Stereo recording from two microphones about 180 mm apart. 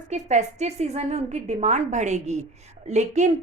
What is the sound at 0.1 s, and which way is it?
A woman's voice, 40° right (ahead or behind).